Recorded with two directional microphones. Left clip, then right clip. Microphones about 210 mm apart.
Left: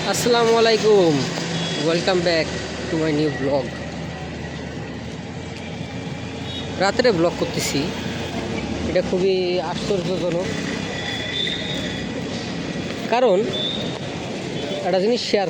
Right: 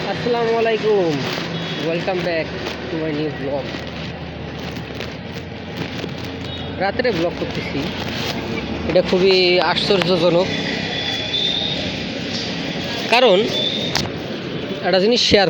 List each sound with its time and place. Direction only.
0.3 s speech: 25° left (ahead or behind)
6.7 s speech: 25° left (ahead or behind)
9.0 s speech: 5° right (ahead or behind)
13.1 s speech: 5° left (ahead or behind)
14.8 s speech: 5° right (ahead or behind)